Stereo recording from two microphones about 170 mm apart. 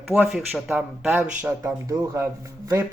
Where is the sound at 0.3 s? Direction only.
Centre (ahead or behind); by 2.2 s 15° right (ahead or behind).